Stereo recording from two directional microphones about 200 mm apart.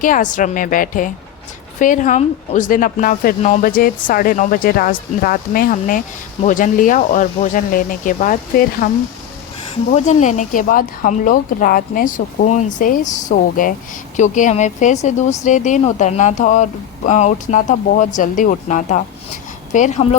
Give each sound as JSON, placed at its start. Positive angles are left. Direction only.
{"t": 0.0, "sound": "a woman's voice", "side_deg": 40}
{"t": 9.9, "sound": "a woman's voice", "side_deg": 35}